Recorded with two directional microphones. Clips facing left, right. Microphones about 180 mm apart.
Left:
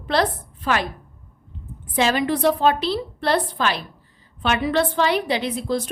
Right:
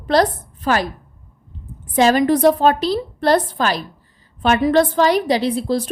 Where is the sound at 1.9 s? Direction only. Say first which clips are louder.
Right 6 dB; 45° right (ahead or behind).